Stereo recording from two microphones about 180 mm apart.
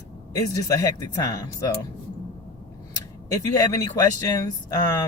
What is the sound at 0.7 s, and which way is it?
Speech, 20° left (ahead or behind).